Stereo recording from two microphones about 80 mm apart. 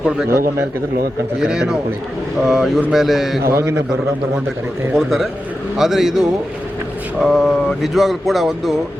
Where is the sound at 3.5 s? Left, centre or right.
Right.